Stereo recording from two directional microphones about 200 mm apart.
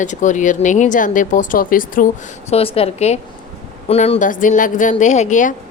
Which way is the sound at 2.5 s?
30° left (ahead or behind).